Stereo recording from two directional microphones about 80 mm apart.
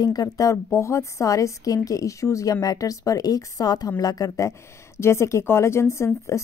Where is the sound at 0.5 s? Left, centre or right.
Left.